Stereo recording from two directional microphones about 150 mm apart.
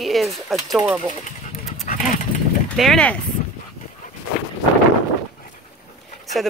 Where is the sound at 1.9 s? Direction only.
60° left (ahead or behind).